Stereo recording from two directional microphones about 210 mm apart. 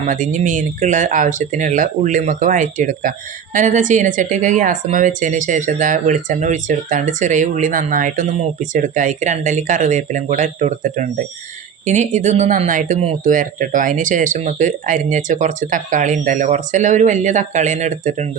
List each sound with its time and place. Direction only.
0.1 s speech: 35° right (ahead or behind)